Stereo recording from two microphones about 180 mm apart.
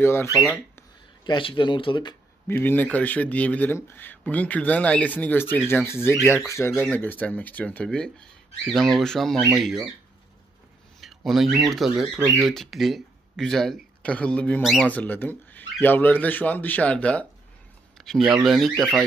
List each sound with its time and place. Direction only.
0.0 s speech: 15° left (ahead or behind)
1.2 s speech: 25° left (ahead or behind)
2.4 s speech: 10° left (ahead or behind)
11.0 s a sound: centre (ahead or behind)
11.7 s speech: centre (ahead or behind)